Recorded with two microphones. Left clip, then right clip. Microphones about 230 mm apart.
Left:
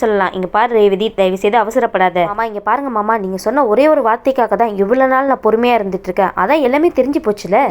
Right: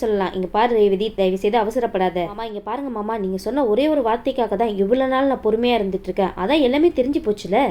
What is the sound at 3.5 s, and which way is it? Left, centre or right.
A woman's voice, centre.